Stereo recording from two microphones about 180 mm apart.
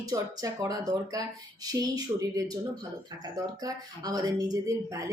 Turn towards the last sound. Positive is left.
turn(degrees=-15)  # may be behind; listen again after turning